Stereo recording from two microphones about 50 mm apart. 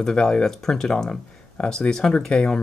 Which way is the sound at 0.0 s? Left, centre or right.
Centre.